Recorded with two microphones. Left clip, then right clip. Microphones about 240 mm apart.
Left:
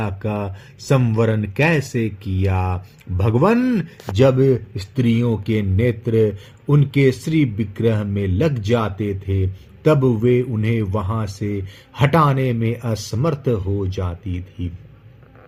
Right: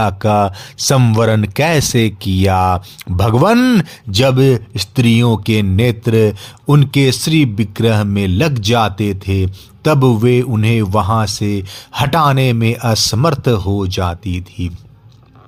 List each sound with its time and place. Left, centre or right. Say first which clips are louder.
0.0 s speech: right 12 dB; right